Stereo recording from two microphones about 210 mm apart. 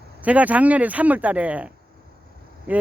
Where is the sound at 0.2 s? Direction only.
5° right (ahead or behind).